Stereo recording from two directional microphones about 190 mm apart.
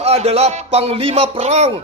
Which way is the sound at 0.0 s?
35° right (ahead or behind).